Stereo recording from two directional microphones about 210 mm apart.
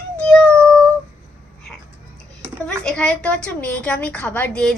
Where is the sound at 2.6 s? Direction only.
5° left (ahead or behind).